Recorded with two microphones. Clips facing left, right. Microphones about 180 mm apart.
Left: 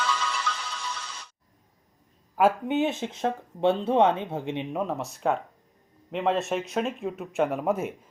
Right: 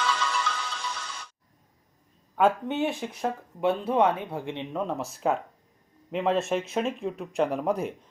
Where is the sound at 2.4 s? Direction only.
10° left (ahead or behind).